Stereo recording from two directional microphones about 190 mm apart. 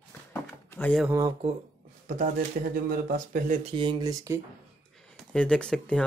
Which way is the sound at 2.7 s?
50° right (ahead or behind).